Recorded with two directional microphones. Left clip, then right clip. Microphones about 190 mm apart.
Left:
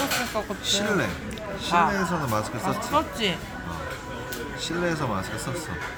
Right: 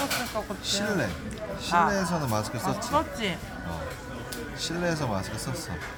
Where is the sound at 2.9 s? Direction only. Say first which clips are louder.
Left 3 dB; 10° left (ahead or behind).